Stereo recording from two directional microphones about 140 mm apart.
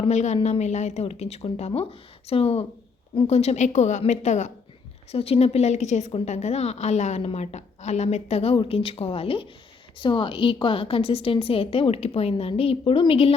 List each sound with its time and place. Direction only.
0.1 s a woman's voice: 55° left (ahead or behind)
5.1 s a woman's voice: 45° left (ahead or behind)